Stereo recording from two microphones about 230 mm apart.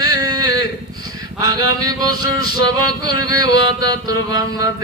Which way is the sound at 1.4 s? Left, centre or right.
Centre.